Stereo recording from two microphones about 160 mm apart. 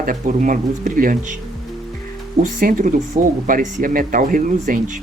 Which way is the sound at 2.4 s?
60° right (ahead or behind).